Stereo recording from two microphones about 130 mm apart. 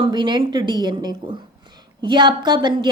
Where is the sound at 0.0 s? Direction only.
35° right (ahead or behind).